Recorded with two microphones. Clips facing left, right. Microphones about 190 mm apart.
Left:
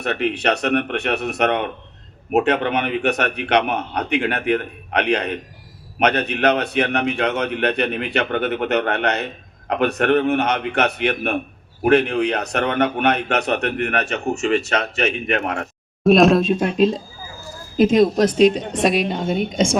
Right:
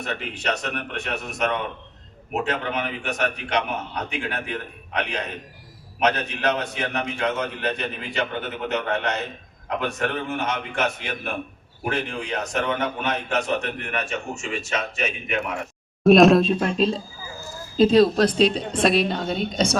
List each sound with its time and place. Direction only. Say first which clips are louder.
0.0 s a man's voice: left 8 dB; 70° left (ahead or behind)
16.0 s speech: even; centre (ahead or behind)
16.6 s a woman's voice: left 4 dB; 15° left (ahead or behind)